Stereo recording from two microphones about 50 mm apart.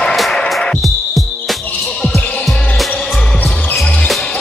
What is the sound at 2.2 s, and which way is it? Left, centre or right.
Music, left.